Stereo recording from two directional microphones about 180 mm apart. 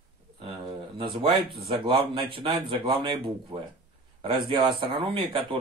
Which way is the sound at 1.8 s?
30° right (ahead or behind).